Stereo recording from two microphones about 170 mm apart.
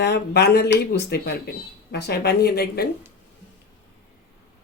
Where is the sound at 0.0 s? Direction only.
80° left.